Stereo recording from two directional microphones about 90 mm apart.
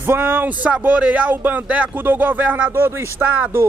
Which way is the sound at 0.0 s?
25° right (ahead or behind).